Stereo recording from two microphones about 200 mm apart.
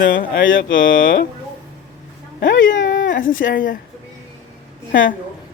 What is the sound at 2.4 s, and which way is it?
Speech, 60° left (ahead or behind).